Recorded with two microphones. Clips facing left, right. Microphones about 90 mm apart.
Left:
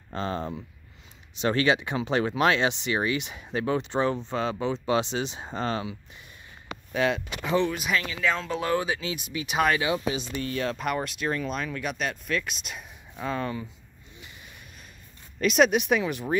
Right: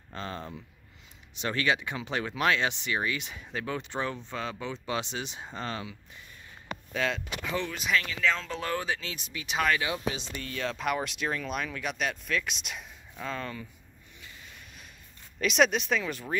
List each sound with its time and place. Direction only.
0.1 s speech: 30° left (ahead or behind)
6.9 s speech: 15° left (ahead or behind)
7.7 s speech: 5° left (ahead or behind)
13.1 s speech: 15° left (ahead or behind)
15.4 s speech: centre (ahead or behind)